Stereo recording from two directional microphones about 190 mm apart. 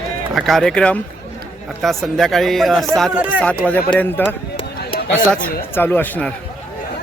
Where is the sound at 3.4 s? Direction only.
5° left (ahead or behind).